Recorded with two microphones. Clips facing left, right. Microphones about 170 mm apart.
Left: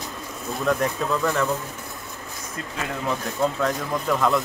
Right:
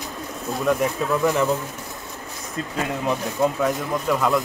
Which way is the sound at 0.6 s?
Centre (ahead or behind).